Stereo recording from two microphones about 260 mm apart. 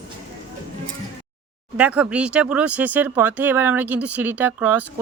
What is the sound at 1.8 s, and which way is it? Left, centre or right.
A woman's voice, centre.